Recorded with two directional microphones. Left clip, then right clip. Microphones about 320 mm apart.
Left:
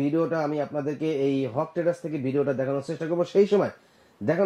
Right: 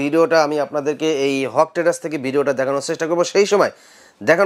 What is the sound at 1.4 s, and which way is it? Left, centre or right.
Speech, centre.